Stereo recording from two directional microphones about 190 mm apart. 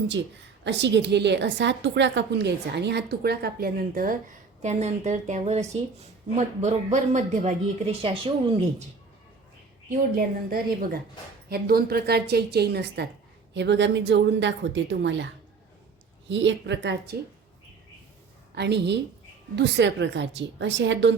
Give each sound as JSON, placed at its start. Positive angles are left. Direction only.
{"t": 0.6, "sound": "a woman's voice", "side_deg": -65}
{"t": 10.2, "sound": "a woman's voice", "side_deg": -50}
{"t": 16.3, "sound": "speech", "side_deg": -70}
{"t": 18.5, "sound": "a woman's voice", "side_deg": -65}